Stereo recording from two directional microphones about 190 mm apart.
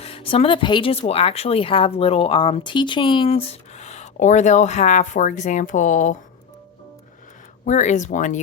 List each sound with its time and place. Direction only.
0.0 s speech: 30° left (ahead or behind)
7.6 s speech: 40° left (ahead or behind)